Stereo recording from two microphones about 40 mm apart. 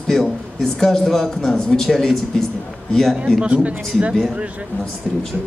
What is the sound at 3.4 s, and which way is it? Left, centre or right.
Speech, right.